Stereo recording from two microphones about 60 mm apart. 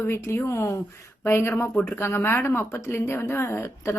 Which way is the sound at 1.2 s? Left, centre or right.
Left.